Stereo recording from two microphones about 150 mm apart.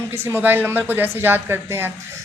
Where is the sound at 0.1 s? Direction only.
15° right (ahead or behind).